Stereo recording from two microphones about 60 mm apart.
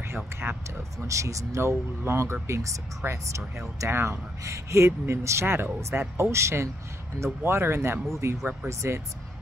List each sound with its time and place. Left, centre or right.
0.0 s speech: right
1.0 s speech: right
2.4 s speech: right